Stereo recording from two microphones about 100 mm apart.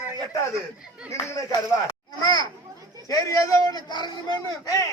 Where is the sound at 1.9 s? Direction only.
40° left (ahead or behind).